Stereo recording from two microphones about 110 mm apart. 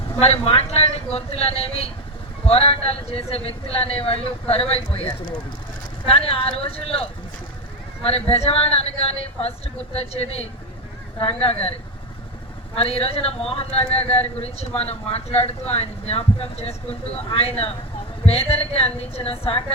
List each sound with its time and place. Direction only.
0.2 s a man's voice: 70° left (ahead or behind)
6.1 s a man's voice: 60° left (ahead or behind)
8.0 s a man's voice: 65° left (ahead or behind)
12.7 s a man's voice: 60° left (ahead or behind)